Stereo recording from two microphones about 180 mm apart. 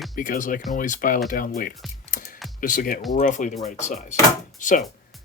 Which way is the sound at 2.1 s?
45° left (ahead or behind).